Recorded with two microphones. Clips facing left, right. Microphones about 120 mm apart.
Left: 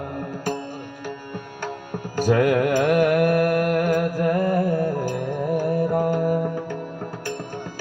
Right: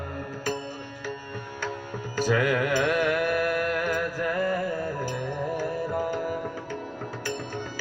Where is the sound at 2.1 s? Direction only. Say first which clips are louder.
Left 6 dB; 50° left (ahead or behind).